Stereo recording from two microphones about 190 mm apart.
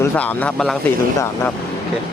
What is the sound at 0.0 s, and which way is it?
Speech, 10° left (ahead or behind).